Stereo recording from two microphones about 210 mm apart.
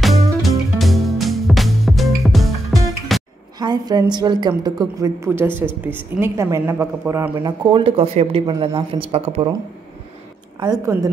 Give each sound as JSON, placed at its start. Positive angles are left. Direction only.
{"t": 0.0, "sound": "music", "side_deg": 0}
{"t": 3.5, "sound": "a woman's voice", "side_deg": -20}
{"t": 7.7, "sound": "a woman's voice", "side_deg": -25}
{"t": 10.6, "sound": "a woman's voice", "side_deg": -15}